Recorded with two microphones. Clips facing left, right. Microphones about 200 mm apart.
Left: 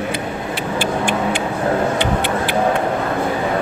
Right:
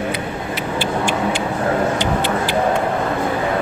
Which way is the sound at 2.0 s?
60° left (ahead or behind).